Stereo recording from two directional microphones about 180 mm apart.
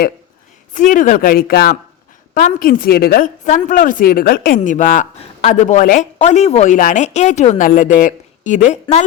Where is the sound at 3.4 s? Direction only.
45° left (ahead or behind).